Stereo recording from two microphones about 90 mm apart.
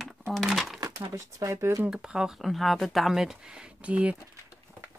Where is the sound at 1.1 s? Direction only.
35° right (ahead or behind).